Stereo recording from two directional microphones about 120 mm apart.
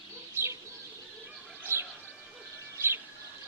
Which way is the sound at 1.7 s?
20° right (ahead or behind).